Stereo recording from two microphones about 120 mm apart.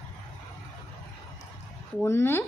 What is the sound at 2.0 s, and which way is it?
Speech, 20° left (ahead or behind).